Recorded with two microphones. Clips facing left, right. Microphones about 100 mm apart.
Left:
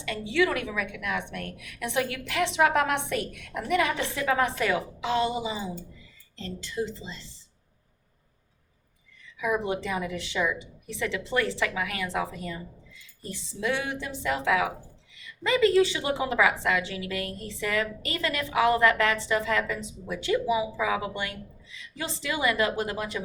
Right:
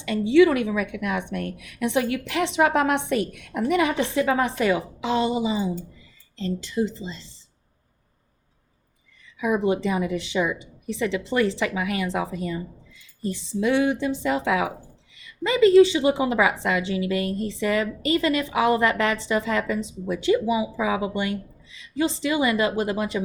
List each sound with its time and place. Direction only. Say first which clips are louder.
0.0 s a woman's voice: right 9 dB; 20° right (ahead or behind)
9.4 s a woman's voice: right 5 dB; 20° right (ahead or behind)
13.6 s a woman's voice: right 8 dB; 20° right (ahead or behind)